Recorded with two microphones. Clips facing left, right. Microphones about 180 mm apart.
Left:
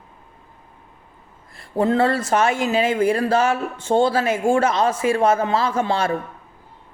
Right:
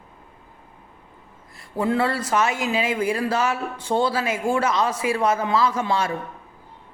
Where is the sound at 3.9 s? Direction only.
30° left (ahead or behind).